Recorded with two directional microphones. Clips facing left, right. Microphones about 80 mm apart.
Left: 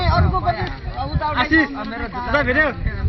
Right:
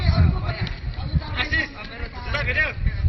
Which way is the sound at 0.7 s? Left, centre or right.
Left.